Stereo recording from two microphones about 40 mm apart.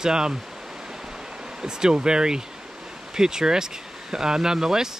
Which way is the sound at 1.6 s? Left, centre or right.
Centre.